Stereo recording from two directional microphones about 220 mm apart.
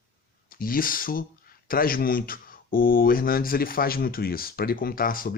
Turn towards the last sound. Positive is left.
turn(degrees=40)  # may be behind; listen again after turning